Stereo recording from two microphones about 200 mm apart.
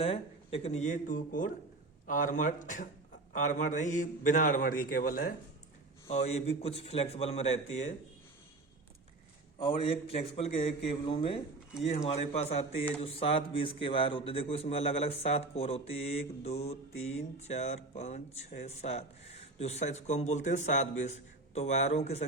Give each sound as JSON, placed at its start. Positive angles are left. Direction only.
{"t": 0.0, "sound": "a man's voice", "side_deg": 30}
{"t": 6.1, "sound": "a man's voice", "side_deg": 30}
{"t": 9.6, "sound": "a man's voice", "side_deg": 25}